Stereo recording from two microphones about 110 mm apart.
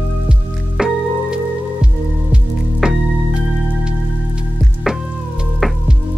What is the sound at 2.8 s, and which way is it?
Music, 5° right (ahead or behind).